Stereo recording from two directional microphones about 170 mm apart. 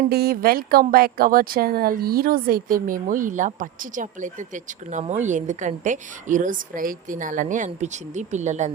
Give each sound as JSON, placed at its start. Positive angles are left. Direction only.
{"t": 0.0, "sound": "speech", "side_deg": -65}